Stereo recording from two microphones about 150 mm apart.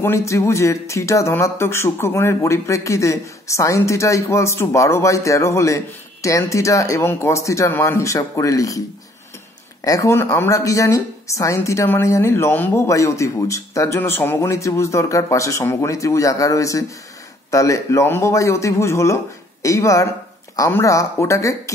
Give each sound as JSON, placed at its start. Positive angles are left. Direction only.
{"t": 0.0, "sound": "a woman's voice", "side_deg": 20}
{"t": 9.8, "sound": "a woman's voice", "side_deg": 20}